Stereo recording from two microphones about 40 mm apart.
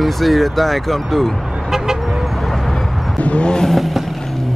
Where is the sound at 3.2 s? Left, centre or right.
Left.